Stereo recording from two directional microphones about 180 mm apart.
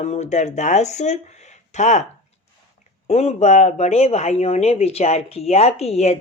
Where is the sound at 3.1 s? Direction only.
35° left (ahead or behind).